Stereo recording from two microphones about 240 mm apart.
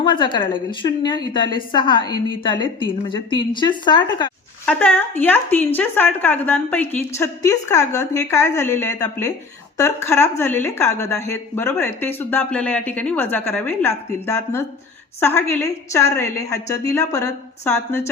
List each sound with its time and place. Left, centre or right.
0.0 s a woman's voice: centre
4.6 s a woman's voice: centre